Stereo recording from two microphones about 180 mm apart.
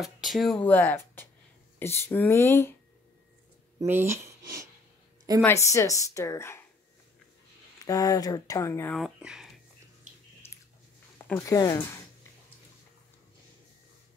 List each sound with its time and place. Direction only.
0.0 s a woman's voice: centre (ahead or behind)
3.8 s speech: 10° right (ahead or behind)
5.4 s a woman's voice: 15° left (ahead or behind)
7.8 s speech: 20° left (ahead or behind)
8.9 s speech: 5° right (ahead or behind)
11.3 s speech: 20° left (ahead or behind)